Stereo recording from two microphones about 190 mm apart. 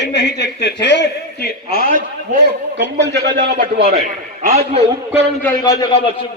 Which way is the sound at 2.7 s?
65° right (ahead or behind).